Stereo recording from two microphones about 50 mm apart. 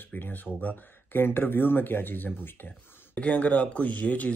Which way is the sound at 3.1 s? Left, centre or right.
Left.